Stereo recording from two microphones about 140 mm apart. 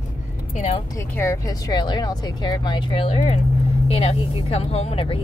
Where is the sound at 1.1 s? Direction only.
20° left (ahead or behind).